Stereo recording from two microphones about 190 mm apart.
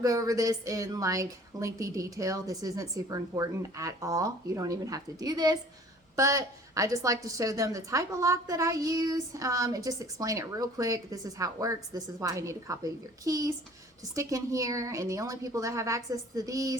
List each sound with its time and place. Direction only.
0.0 s a woman's voice: 20° right (ahead or behind)